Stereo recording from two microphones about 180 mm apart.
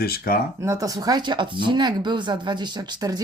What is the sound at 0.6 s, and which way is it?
Speech, 20° right (ahead or behind).